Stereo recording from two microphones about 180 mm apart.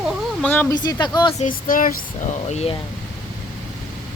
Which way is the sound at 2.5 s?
35° left (ahead or behind).